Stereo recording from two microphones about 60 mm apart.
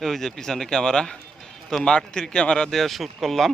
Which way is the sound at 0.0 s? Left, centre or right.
Centre.